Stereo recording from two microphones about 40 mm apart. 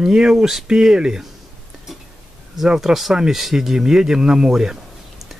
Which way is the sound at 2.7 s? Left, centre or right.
Centre.